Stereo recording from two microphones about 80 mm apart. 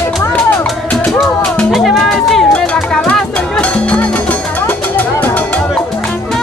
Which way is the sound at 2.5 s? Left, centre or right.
Centre.